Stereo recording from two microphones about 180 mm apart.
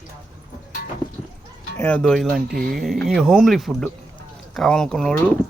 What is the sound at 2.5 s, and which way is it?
Speech, 55° right (ahead or behind).